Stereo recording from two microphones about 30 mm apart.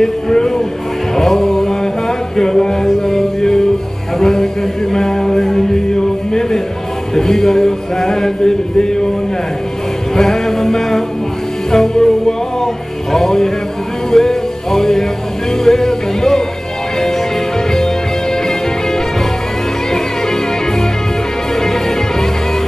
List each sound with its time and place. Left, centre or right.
0.0 s a sound: centre
1.1 s music: centre
7.2 s music: centre
10.1 s music: centre
21.5 s music: centre